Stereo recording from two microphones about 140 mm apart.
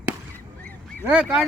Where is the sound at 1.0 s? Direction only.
5° right (ahead or behind).